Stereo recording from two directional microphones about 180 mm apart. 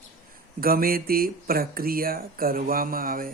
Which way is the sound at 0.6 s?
55° right (ahead or behind).